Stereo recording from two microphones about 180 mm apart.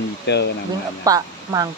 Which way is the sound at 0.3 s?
70° left (ahead or behind).